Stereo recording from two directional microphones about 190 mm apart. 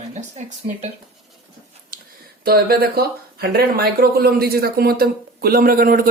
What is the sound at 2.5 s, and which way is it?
Speech, 55° right (ahead or behind).